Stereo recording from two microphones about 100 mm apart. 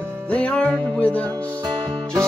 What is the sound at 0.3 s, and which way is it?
Music, 15° left (ahead or behind).